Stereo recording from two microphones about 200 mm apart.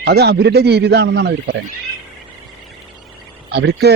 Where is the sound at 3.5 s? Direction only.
55° right (ahead or behind).